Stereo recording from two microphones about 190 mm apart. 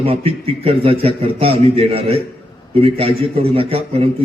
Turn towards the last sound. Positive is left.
turn(degrees=-30)  # may be behind; listen again after turning